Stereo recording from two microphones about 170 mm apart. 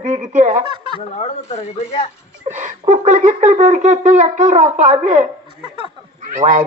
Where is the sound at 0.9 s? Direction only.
35° left (ahead or behind).